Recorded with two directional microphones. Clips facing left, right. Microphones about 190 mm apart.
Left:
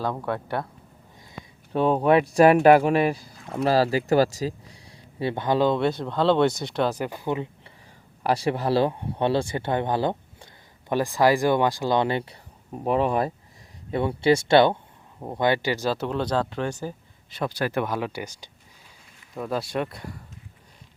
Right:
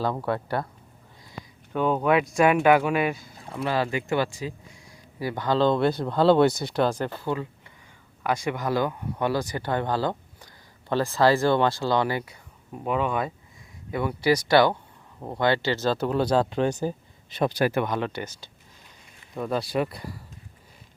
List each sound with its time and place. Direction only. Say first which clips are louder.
0.0 s speech: right 1 dB; 5° right (ahead or behind)
1.7 s speech: left 3 dB; 30° left (ahead or behind)
5.7 s speech: right 1 dB; centre (ahead or behind); by 7.4 s 20° left (ahead or behind)
8.2 s speech: left 3 dB; 35° left (ahead or behind); by 16.0 s 15° left (ahead or behind)
16.0 s speech: right 3 dB; 5° right (ahead or behind)
17.7 s speech: right 1 dB; centre (ahead or behind)
19.3 s speech: right 1 dB; centre (ahead or behind)